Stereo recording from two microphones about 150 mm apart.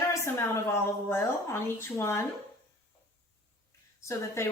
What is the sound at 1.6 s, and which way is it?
Speech, 15° left (ahead or behind).